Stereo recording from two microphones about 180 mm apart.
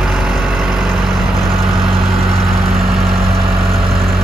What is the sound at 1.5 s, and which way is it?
Vehicle, 30° right (ahead or behind).